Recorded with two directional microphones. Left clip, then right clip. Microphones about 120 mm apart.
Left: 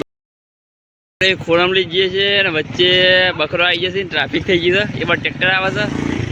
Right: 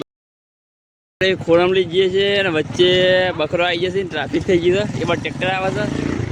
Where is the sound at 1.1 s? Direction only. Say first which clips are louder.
Left 1 dB; 40° right (ahead or behind).